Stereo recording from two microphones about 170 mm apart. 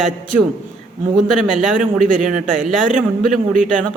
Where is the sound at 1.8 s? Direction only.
50° right (ahead or behind).